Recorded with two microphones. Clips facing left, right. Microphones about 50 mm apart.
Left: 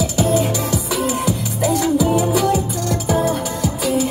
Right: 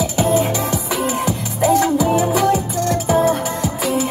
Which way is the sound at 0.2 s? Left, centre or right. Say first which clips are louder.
Right 1 dB; right.